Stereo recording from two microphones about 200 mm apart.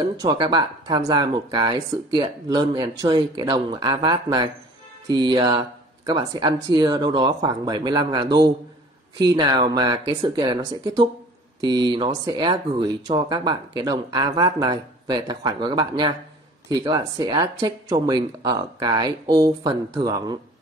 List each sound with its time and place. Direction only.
0.2 s speech: 20° right (ahead or behind)